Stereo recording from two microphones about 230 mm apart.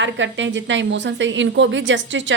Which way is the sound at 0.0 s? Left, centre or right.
Right.